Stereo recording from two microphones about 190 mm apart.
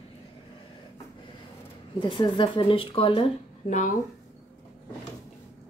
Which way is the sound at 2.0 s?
25° left (ahead or behind).